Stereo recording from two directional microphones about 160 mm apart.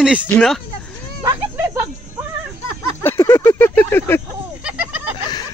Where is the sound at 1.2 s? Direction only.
20° right (ahead or behind).